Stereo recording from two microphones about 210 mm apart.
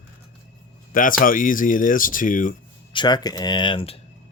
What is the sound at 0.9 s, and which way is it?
Speech, 40° left (ahead or behind).